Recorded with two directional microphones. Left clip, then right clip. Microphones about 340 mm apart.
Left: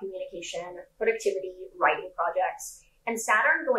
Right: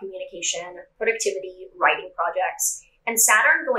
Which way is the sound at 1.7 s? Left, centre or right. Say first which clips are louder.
Right 4 dB; centre.